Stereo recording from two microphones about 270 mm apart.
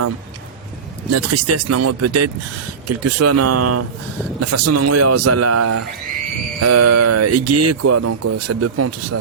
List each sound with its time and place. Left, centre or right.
1.1 s speech: right